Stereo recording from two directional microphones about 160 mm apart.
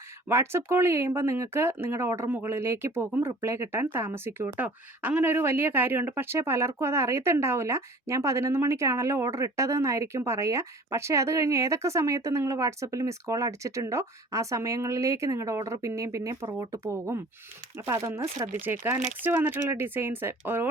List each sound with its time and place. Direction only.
0.3 s speech: 15° right (ahead or behind)